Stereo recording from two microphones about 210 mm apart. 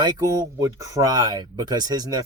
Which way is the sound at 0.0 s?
20° right (ahead or behind).